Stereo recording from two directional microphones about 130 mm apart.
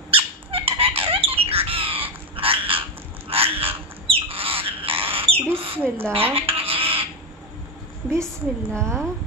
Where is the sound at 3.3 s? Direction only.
50° right (ahead or behind).